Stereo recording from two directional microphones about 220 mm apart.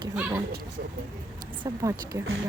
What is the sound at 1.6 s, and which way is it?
Speech, 15° right (ahead or behind).